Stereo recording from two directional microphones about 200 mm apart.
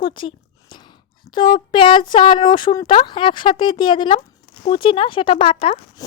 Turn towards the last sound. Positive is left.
turn(degrees=30)  # may be behind; listen again after turning